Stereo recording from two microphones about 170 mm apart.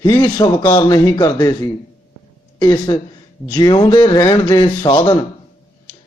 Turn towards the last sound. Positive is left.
turn(degrees=25)  # may be behind; listen again after turning